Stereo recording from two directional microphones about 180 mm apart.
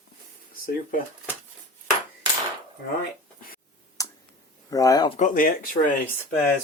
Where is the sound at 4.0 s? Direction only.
20° left (ahead or behind).